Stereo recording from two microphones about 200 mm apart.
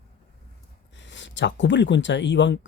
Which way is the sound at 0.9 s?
65° left (ahead or behind).